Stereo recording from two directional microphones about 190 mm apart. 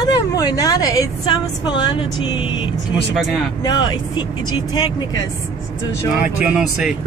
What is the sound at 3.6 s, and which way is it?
A woman's voice, 20° left (ahead or behind).